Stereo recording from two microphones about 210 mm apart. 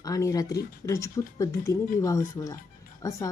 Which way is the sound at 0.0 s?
15° left (ahead or behind).